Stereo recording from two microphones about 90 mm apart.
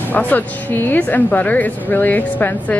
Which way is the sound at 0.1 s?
20° left (ahead or behind).